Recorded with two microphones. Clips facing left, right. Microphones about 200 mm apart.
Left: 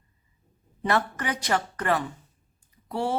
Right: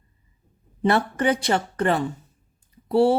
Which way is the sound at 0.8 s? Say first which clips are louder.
Right 5 dB; 30° right (ahead or behind).